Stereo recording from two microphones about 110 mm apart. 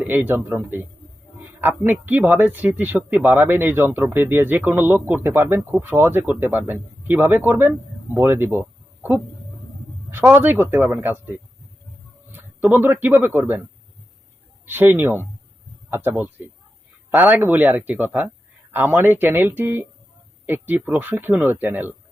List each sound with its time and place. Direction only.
0.0 s speech: 15° right (ahead or behind)
10.1 s speech: 20° right (ahead or behind)
12.3 s a sound: 20° right (ahead or behind)
12.7 s speech: 20° right (ahead or behind)
14.6 s a man's voice: 20° right (ahead or behind)